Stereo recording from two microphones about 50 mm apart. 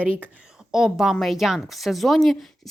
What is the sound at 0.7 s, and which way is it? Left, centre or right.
A woman's voice, centre.